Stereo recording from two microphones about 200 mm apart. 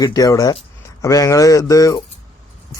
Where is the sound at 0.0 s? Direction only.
20° left (ahead or behind).